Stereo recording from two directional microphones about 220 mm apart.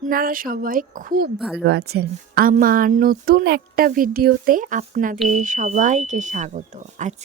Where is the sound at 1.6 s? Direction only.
45° right (ahead or behind).